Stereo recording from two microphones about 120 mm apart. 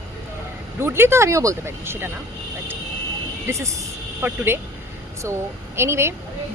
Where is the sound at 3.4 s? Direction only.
25° right (ahead or behind).